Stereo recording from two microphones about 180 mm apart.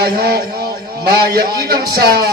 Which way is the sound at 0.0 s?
60° right (ahead or behind).